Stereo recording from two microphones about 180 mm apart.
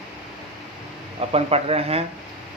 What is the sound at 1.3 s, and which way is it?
Speech, 35° right (ahead or behind).